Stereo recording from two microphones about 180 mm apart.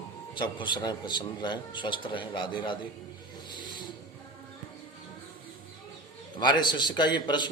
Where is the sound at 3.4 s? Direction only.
25° left (ahead or behind).